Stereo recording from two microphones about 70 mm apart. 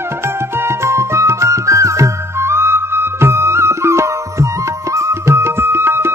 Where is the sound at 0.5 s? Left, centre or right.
Right.